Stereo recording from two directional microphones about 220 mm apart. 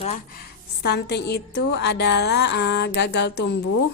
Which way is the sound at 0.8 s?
50° left (ahead or behind).